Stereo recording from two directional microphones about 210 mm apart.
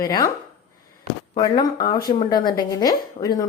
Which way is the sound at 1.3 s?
20° left (ahead or behind).